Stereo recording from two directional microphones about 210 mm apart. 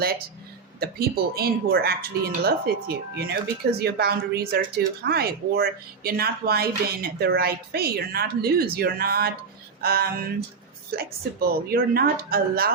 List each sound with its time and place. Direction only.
0.8 s speech: 45° right (ahead or behind)